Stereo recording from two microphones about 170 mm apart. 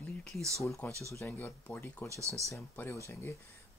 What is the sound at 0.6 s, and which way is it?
Speech, 15° left (ahead or behind).